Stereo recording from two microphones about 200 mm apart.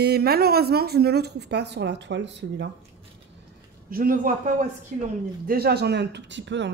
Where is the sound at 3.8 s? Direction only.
45° right (ahead or behind); by 6.6 s 65° right (ahead or behind).